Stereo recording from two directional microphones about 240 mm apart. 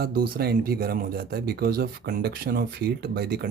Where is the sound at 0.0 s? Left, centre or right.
Right.